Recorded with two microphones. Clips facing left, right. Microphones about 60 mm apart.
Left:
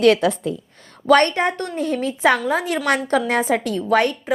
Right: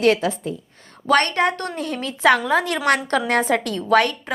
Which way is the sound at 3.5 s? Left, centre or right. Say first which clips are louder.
Even; centre.